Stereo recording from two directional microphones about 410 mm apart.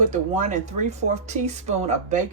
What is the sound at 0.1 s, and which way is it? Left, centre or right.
Speech, centre.